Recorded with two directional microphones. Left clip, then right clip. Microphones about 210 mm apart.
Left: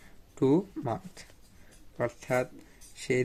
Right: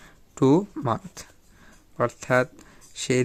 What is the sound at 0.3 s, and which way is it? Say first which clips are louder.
Speech: right 6 dB; 35° right (ahead or behind).